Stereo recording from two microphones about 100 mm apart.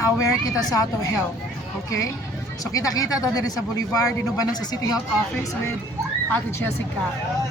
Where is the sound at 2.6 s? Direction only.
35° left (ahead or behind).